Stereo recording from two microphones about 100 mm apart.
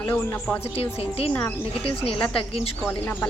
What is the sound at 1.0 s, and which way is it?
Speech, 90° left.